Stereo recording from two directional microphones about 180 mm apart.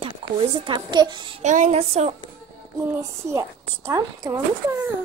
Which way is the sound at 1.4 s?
40° right (ahead or behind).